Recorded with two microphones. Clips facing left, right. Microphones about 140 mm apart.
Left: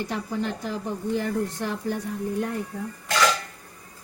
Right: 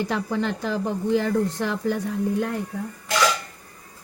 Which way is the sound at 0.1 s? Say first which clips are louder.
Right 3 dB; 90° right.